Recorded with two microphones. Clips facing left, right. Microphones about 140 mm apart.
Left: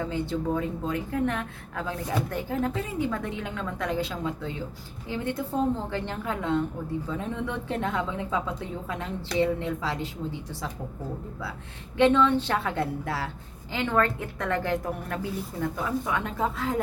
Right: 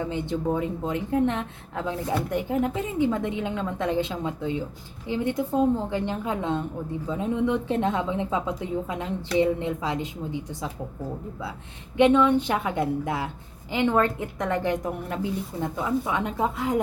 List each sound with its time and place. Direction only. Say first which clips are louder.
0.0 s a woman's voice: right 1 dB; 20° right (ahead or behind)
11.9 s a woman's voice: right 2 dB; 15° right (ahead or behind)